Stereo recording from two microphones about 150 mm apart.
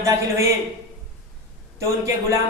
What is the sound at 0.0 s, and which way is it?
Speech, 20° right (ahead or behind).